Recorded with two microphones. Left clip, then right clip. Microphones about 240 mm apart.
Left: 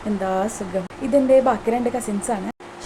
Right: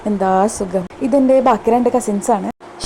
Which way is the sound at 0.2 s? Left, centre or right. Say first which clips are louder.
Right 9 dB; right.